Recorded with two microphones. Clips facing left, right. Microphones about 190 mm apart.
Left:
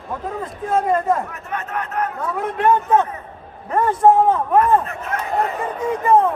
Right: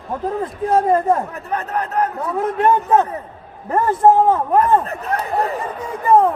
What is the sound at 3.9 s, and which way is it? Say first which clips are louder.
Speech: right 1 dB; centre (ahead or behind).